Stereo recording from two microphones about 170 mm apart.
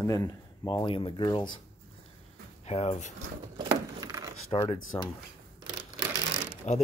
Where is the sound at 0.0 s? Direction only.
20° left (ahead or behind).